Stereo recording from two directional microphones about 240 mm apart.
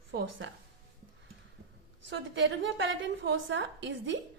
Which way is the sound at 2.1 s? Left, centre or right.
Right.